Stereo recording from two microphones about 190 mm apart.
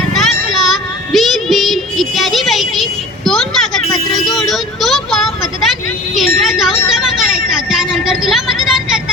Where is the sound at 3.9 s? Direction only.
20° left (ahead or behind).